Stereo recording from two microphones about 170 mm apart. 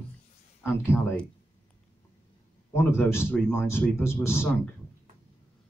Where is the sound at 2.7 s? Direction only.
15° left (ahead or behind).